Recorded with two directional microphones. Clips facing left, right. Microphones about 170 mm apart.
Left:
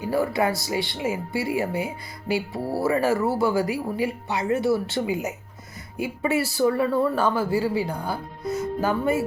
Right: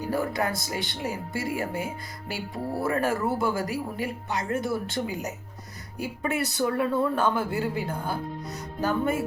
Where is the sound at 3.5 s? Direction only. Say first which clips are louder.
Left 5 dB; 45° right (ahead or behind).